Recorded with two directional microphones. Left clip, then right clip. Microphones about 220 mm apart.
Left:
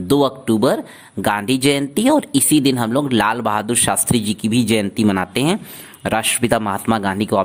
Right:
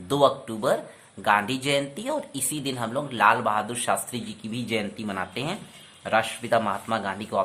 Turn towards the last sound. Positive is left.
turn(degrees=45)  # may be behind; listen again after turning